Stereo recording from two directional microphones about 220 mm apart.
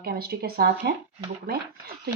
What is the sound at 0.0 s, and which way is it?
Speech, 45° right (ahead or behind).